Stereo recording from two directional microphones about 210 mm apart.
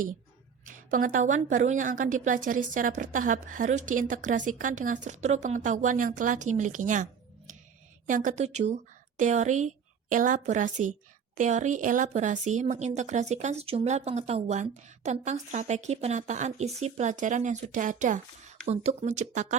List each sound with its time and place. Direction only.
0.6 s a woman's voice: 40° right (ahead or behind)